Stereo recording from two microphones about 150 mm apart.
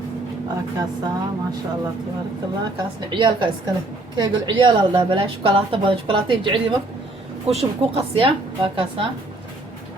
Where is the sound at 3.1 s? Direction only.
30° right (ahead or behind).